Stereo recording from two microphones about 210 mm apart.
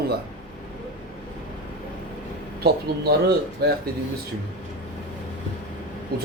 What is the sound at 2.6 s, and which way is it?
Speech, 50° right (ahead or behind).